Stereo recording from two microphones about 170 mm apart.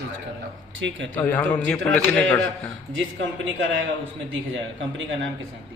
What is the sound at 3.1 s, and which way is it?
Speech, 90° right.